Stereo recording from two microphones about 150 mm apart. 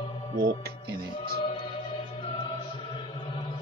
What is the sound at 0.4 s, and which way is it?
Speech, 85° right.